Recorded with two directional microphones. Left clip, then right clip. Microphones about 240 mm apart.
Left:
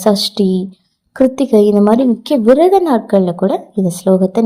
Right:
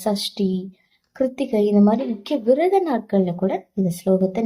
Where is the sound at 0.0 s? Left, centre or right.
Left.